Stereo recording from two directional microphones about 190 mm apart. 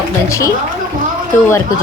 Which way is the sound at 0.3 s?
15° left (ahead or behind).